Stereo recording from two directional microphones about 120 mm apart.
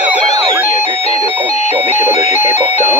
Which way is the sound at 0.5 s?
20° right (ahead or behind).